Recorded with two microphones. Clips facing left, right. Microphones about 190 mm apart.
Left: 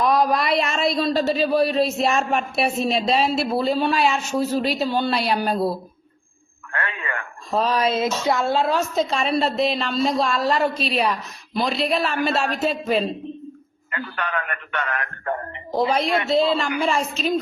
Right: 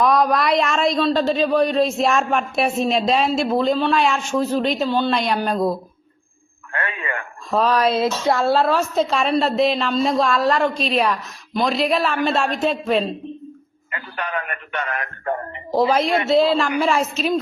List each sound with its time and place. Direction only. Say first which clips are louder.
0.0 s a woman's voice: right 2 dB; centre (ahead or behind)
6.8 s radio: right 3 dB; 20° right (ahead or behind)
7.5 s a woman's voice: right 3 dB; centre (ahead or behind)
7.9 s speech: right 2 dB; 35° right (ahead or behind)
8.6 s a woman's voice: right 2 dB; centre (ahead or behind)
13.9 s a man's voice: even; 20° right (ahead or behind)
15.7 s a woman's voice: right 3 dB; centre (ahead or behind)